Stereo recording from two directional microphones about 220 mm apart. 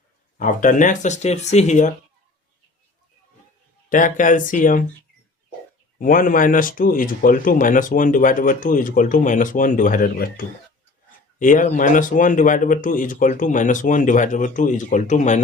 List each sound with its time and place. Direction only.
0.3 s speech: 35° left (ahead or behind)
3.8 s speech: 35° left (ahead or behind)
6.0 s speech: 40° left (ahead or behind)